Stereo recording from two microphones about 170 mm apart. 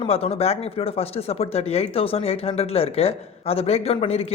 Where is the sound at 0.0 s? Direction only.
35° left (ahead or behind).